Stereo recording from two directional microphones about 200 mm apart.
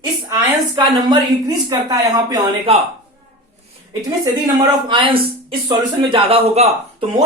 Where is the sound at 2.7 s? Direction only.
30° right (ahead or behind).